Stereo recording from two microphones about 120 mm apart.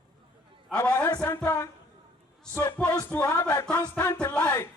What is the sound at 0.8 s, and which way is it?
Music, 15° left (ahead or behind).